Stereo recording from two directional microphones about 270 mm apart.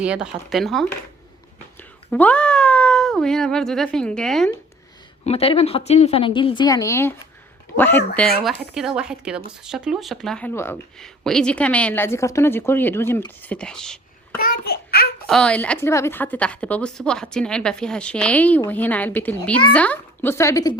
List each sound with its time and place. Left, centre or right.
0.0 s speech: centre
2.0 s speech: centre
5.2 s a woman's voice: left; by 14.0 s centre
14.3 s a sound: left
15.3 s a woman's voice: centre